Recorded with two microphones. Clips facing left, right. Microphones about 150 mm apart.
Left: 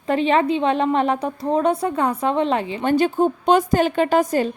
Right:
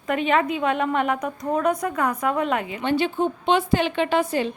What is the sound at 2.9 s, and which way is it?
A woman's voice, 40° left (ahead or behind).